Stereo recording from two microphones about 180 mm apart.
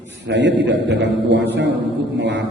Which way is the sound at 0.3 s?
80° right.